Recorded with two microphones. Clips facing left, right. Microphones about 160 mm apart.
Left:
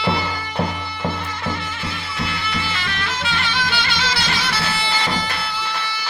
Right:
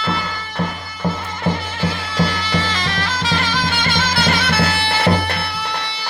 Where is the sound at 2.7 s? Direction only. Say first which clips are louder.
Right 4 dB; 40° right (ahead or behind).